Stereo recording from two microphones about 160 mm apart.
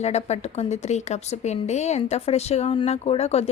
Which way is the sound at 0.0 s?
45° left (ahead or behind).